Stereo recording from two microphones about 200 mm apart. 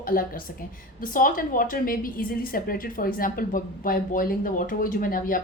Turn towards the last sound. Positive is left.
turn(degrees=45)  # may be behind; listen again after turning